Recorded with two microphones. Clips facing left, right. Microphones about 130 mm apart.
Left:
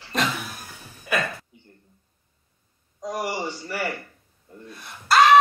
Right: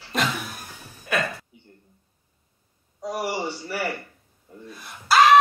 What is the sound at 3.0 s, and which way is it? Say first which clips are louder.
A man's voice: right 1 dB; 10° right (ahead or behind).